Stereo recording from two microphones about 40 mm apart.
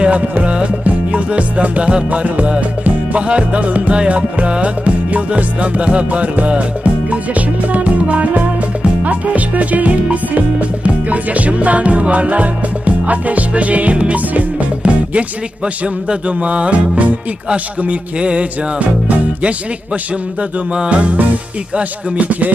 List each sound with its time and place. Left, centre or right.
0.0 s music: right
2.0 s music: right
15.6 s music: right
20.7 s music: right
21.0 s music: right